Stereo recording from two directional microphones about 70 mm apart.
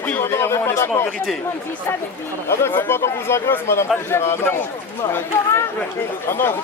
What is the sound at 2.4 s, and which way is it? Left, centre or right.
Speech, left.